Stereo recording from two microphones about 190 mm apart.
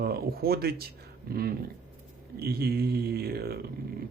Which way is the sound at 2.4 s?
55° right (ahead or behind).